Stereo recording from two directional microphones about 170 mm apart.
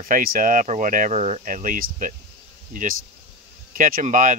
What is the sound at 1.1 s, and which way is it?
Speech, 40° right (ahead or behind).